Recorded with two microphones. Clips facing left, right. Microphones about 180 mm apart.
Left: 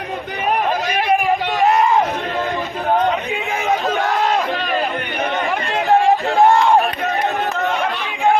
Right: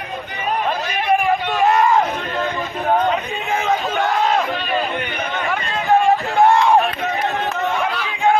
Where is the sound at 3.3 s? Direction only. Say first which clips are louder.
Right 1 dB; 15° left (ahead or behind).